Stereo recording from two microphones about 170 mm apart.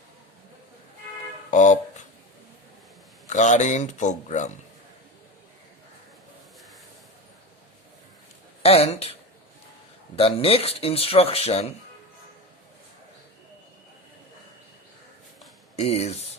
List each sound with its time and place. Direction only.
1.5 s music: 45° left (ahead or behind)
3.2 s speech: 45° left (ahead or behind)
8.6 s speech: 35° left (ahead or behind)
10.2 s speech: 35° left (ahead or behind)
15.7 s speech: 40° left (ahead or behind)